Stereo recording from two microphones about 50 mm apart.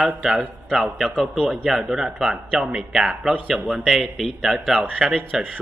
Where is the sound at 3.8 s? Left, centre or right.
Centre.